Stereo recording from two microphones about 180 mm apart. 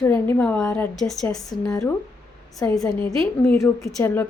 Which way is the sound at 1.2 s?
20° left (ahead or behind).